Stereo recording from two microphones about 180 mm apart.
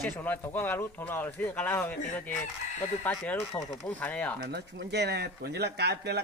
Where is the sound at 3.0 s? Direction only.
10° left (ahead or behind).